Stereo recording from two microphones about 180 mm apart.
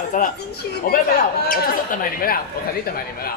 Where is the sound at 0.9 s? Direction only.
60° left (ahead or behind).